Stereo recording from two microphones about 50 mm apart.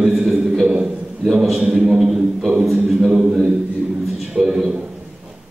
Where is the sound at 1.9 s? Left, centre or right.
Centre.